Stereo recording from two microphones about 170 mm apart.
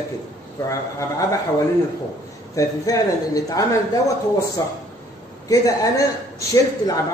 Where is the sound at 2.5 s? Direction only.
20° left (ahead or behind).